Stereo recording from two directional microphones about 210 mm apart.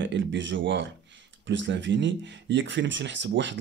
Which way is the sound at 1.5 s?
60° right (ahead or behind).